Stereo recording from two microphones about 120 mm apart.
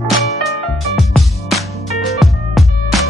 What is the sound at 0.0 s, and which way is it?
Music, centre (ahead or behind).